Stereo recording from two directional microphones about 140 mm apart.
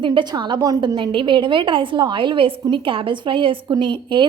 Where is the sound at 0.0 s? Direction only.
35° right (ahead or behind).